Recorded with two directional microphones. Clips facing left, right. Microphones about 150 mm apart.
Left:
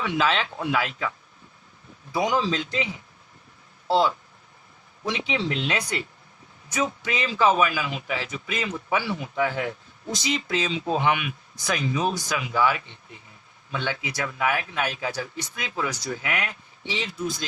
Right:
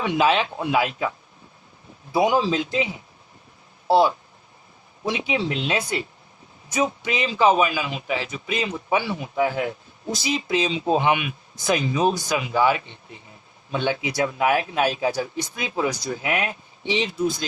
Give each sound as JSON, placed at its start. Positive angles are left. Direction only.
{"t": 0.0, "sound": "speech", "side_deg": -20}
{"t": 2.1, "sound": "a man's voice", "side_deg": -15}
{"t": 16.2, "sound": "a man's voice", "side_deg": -25}